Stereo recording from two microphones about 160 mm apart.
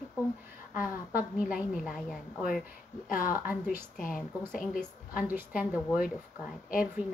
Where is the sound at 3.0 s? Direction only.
60° left (ahead or behind).